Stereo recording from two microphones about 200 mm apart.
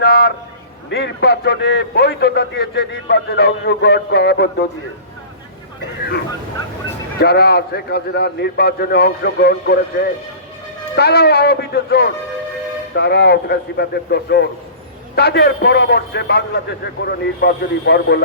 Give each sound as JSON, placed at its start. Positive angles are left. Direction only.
{"t": 0.0, "sound": "a sound", "side_deg": 50}
{"t": 0.9, "sound": "a man's voice", "side_deg": 60}
{"t": 7.2, "sound": "a man's voice", "side_deg": 55}